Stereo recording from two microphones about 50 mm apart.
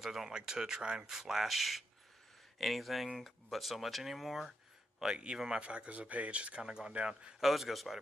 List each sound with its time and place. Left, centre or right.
0.0 s speech: centre
5.0 s speech: centre
7.3 s speech: centre